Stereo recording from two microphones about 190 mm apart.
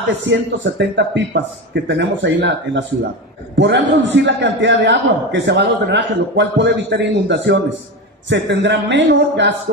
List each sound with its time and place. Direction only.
0.2 s a man's voice: 70° right (ahead or behind)